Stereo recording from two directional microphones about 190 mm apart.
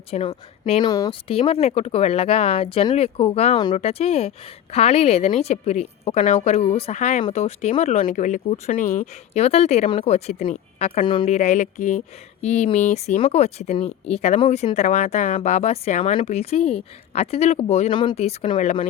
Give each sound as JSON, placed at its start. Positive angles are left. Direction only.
{"t": 0.1, "sound": "speech", "side_deg": 30}
{"t": 0.9, "sound": "speech", "side_deg": 20}
{"t": 1.3, "sound": "speech", "side_deg": 30}